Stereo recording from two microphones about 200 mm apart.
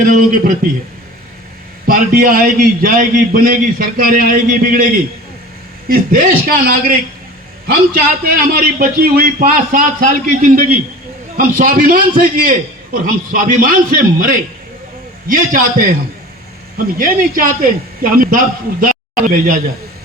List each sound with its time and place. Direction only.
0.0 s a man's voice: 45° right (ahead or behind)
1.9 s a man's voice: 45° right (ahead or behind)
5.9 s a man's voice: 45° right (ahead or behind)
7.9 s a man's voice: 45° right (ahead or behind)